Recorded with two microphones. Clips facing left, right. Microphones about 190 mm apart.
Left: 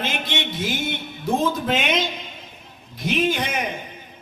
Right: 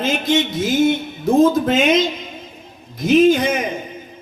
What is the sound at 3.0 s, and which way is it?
Speech, 45° right (ahead or behind).